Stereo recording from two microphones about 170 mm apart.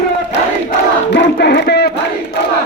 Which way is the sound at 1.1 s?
85° left.